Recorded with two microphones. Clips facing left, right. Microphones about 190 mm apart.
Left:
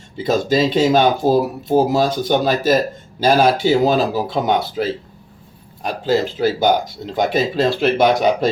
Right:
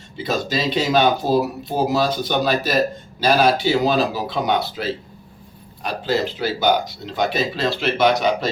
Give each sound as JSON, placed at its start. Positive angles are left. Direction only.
{"t": 0.2, "sound": "speech", "side_deg": 50}